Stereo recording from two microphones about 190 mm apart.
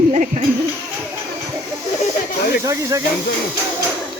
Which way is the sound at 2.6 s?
15° right (ahead or behind).